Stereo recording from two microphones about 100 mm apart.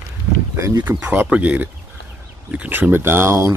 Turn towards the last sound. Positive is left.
turn(degrees=-25)  # may be behind; listen again after turning